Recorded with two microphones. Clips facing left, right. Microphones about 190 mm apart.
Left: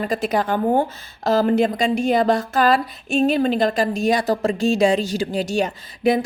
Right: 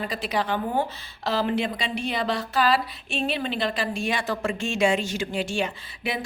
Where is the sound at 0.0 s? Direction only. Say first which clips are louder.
Left 6 dB; 45° left (ahead or behind).